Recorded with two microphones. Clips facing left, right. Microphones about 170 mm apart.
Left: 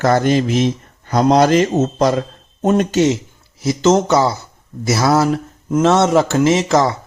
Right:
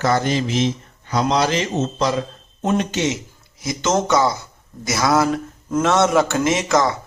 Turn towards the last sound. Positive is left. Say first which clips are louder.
# left 4 dB
turn(degrees=30)  # may be behind; listen again after turning